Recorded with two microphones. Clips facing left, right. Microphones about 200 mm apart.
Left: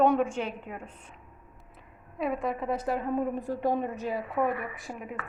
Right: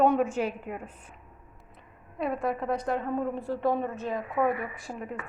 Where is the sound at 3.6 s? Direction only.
15° left (ahead or behind).